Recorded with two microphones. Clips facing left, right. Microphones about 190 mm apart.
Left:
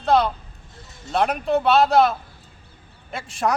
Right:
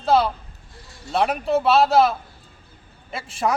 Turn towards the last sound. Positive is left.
turn(degrees=0)  # may be behind; listen again after turning